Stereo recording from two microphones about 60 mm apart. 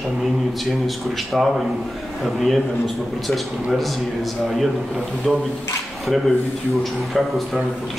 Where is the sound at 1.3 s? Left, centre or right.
Centre.